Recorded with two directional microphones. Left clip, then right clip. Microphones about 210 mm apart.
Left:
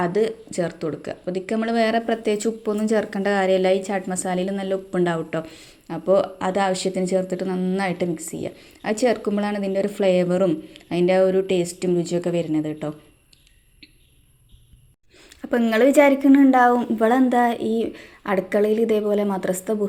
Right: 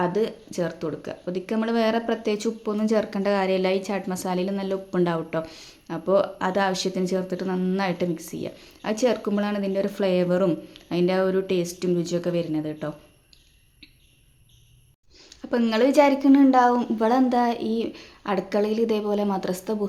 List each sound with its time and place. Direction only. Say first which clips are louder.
0.0 s speech: left 3 dB; 5° left (ahead or behind)
15.4 s a woman's voice: left 3 dB; 10° left (ahead or behind)